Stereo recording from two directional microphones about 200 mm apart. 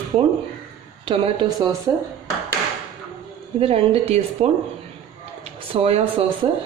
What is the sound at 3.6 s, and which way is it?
Speech, 30° right (ahead or behind).